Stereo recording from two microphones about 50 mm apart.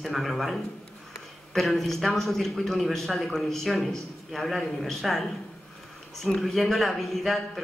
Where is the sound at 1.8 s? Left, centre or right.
Centre.